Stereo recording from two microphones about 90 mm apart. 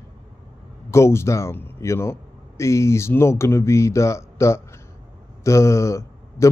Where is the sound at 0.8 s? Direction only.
30° left (ahead or behind).